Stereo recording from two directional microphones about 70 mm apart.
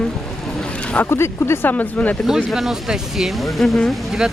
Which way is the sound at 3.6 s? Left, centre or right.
Centre.